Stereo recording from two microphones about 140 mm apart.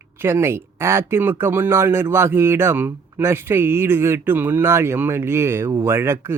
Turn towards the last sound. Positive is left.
turn(degrees=-15)  # may be behind; listen again after turning